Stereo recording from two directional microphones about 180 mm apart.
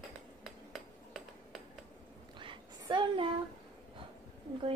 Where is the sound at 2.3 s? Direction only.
25° right (ahead or behind).